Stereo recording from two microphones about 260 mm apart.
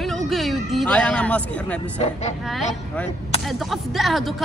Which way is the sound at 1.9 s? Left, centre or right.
Left.